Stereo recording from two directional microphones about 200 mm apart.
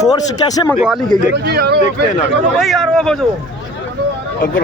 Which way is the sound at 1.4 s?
55° right (ahead or behind).